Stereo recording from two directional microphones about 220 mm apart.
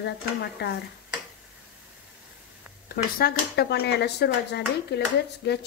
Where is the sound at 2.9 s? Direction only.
45° left (ahead or behind).